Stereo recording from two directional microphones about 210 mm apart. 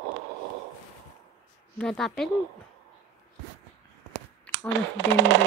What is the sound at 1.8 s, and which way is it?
Speech, centre (ahead or behind).